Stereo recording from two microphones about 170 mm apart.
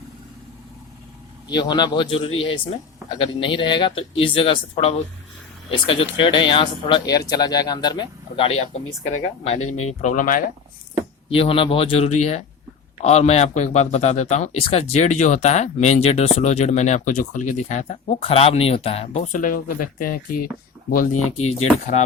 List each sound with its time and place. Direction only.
1.5 s a man's voice: 25° left (ahead or behind); by 10.4 s 50° left (ahead or behind)
11.3 s a man's voice: 35° left (ahead or behind); by 21.2 s 55° left (ahead or behind)
21.3 s a man's voice: 35° left (ahead or behind)